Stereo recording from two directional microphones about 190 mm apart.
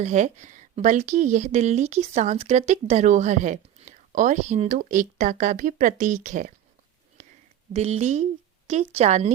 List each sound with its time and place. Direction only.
0.0 s speech: 40° right (ahead or behind)
7.2 s a sound: 40° right (ahead or behind)
7.7 s speech: 35° right (ahead or behind)